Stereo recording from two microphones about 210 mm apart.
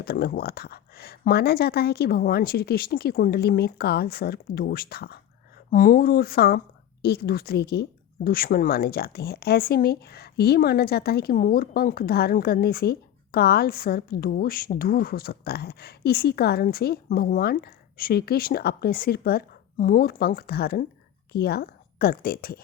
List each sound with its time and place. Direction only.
0.0 s a woman's voice: 45° left (ahead or behind)